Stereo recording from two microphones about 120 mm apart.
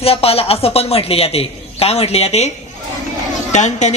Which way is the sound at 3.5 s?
80° left.